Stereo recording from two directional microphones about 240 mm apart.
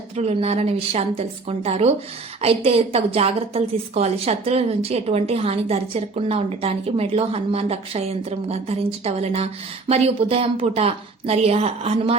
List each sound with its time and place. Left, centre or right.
0.2 s a woman's voice: right